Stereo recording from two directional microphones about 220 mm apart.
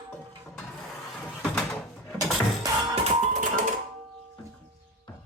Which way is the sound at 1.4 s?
5° left (ahead or behind).